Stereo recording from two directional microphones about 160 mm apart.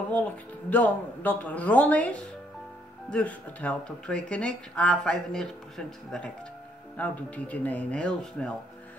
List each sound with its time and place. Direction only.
0.1 s speech: 10° left (ahead or behind)